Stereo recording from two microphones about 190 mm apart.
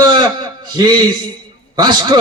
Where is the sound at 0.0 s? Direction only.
25° right (ahead or behind).